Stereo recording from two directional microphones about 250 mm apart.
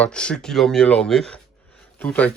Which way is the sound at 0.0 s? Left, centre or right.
Centre.